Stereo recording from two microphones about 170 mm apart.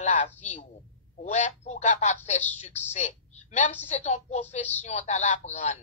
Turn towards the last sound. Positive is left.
turn(degrees=45)  # may be behind; listen again after turning